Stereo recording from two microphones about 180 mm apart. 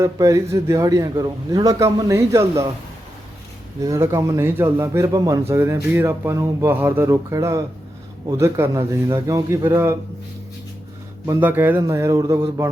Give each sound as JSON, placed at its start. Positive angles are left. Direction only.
{"t": 0.0, "sound": "a man's voice", "side_deg": -15}
{"t": 3.8, "sound": "a man's voice", "side_deg": -15}
{"t": 11.3, "sound": "a man's voice", "side_deg": -10}